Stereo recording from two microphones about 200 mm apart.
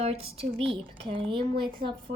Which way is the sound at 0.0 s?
30° right (ahead or behind).